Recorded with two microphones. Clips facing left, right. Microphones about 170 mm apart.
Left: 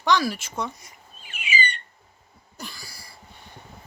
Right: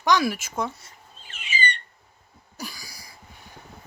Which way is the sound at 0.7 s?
10° left (ahead or behind).